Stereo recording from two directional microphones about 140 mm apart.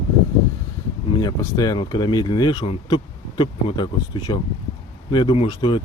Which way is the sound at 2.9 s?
35° left (ahead or behind).